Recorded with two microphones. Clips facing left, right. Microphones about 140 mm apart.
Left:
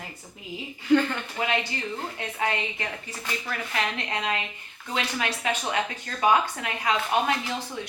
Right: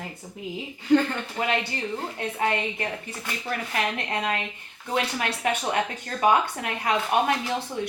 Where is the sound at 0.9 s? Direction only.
40° right (ahead or behind).